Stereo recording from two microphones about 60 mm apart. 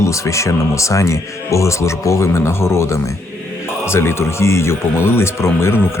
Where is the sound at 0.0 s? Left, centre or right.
Left.